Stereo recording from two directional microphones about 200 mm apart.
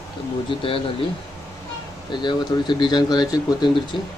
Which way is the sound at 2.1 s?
25° left (ahead or behind).